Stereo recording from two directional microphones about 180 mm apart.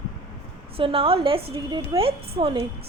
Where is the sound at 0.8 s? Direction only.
30° right (ahead or behind).